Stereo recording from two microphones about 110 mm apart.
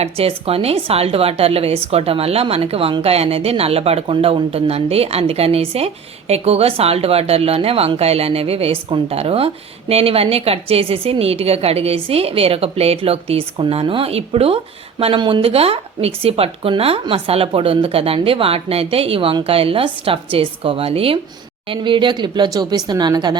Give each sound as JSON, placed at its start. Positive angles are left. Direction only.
{"t": 0.0, "sound": "a woman's voice", "side_deg": -65}
{"t": 21.7, "sound": "speech", "side_deg": -45}